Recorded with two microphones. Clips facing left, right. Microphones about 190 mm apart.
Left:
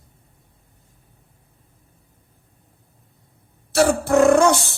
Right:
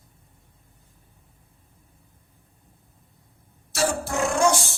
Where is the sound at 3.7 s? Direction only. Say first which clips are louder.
Left 9 dB; 60° left (ahead or behind).